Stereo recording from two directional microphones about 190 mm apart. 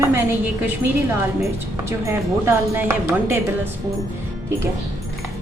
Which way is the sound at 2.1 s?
15° right (ahead or behind).